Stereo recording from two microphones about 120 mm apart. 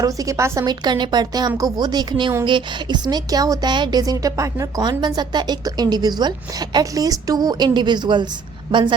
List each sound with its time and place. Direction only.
0.0 s a woman's voice: 25° right (ahead or behind)